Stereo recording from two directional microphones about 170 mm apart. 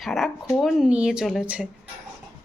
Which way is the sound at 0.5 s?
Centre (ahead or behind).